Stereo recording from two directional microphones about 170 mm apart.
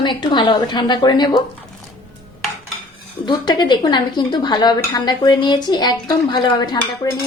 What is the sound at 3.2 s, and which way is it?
Speech, 25° left (ahead or behind).